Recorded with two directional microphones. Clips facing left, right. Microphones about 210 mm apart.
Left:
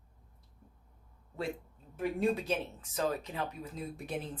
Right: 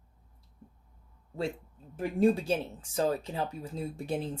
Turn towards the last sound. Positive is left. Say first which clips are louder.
# right 5 dB
turn(degrees=-30)  # may be behind; listen again after turning